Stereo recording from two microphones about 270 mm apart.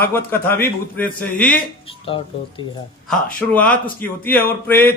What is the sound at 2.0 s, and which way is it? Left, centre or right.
Speech, centre.